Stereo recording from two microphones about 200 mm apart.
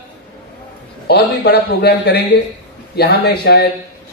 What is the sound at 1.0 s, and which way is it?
Speech, 55° left (ahead or behind).